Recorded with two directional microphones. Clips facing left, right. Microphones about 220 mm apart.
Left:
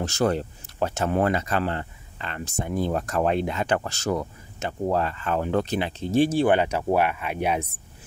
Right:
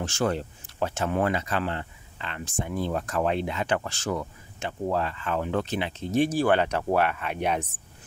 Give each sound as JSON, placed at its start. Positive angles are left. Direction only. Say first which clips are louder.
{"t": 0.0, "sound": "speech", "louder": "left 3 dB", "side_deg": 40}